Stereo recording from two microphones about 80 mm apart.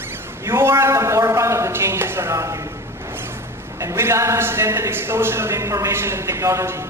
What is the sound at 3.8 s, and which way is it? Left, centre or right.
A man's voice, right.